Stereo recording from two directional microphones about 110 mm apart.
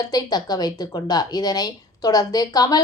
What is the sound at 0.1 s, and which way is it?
A woman's voice, 35° left (ahead or behind).